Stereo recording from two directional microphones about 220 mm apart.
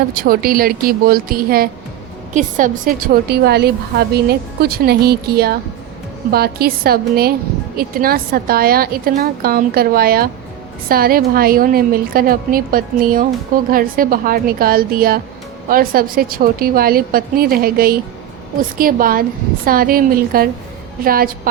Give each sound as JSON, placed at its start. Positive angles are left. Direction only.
{"t": 0.1, "sound": "a woman's voice", "side_deg": -40}